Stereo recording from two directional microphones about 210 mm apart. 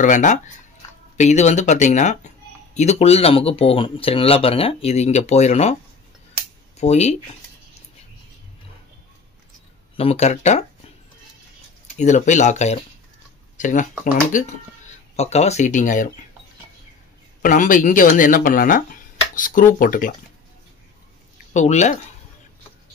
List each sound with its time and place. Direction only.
0.0 s speech: 35° left (ahead or behind)
6.8 s speech: 30° left (ahead or behind)
9.9 s speech: 30° left (ahead or behind)
12.0 s speech: 35° left (ahead or behind)
17.4 s speech: 40° left (ahead or behind)
21.5 s speech: 35° left (ahead or behind)